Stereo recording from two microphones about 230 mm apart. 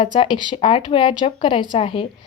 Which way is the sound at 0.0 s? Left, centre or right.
Left.